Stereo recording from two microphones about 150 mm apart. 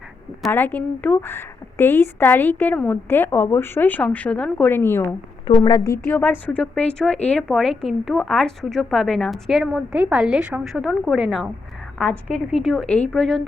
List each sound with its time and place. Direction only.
0.5 s a woman's voice: 10° left (ahead or behind)
5.5 s a woman's voice: 30° left (ahead or behind)
6.1 s speech: 10° left (ahead or behind)